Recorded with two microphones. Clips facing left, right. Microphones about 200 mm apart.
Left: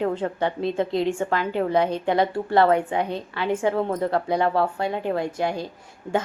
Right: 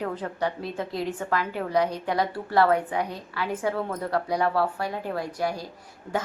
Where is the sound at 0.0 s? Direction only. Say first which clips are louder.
Left 5 dB; 25° left (ahead or behind).